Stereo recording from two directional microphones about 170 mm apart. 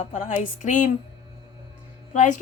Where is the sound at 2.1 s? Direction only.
45° left (ahead or behind).